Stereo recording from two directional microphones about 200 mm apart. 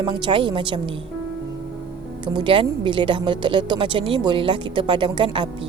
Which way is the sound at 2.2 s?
20° right (ahead or behind).